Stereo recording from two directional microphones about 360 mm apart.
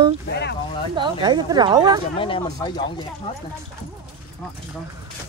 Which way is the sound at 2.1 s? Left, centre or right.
Centre.